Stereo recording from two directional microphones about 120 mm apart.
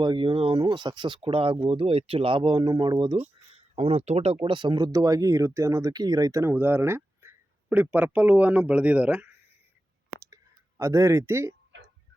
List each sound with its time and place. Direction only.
0.0 s speech: 45° right (ahead or behind)
3.5 s speech: 55° right (ahead or behind)
4.4 s speech: 40° right (ahead or behind); by 9.3 s 10° right (ahead or behind)
10.2 s clicking: 25° right (ahead or behind)